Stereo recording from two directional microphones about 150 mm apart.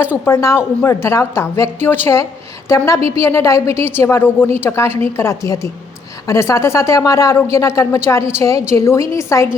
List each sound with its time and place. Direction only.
0.3 s a woman's voice: 15° left (ahead or behind)